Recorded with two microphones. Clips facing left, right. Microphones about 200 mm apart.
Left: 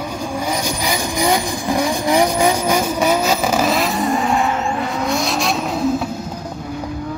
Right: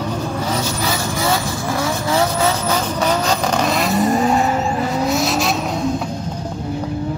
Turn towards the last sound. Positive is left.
turn(degrees=0)  # may be behind; listen again after turning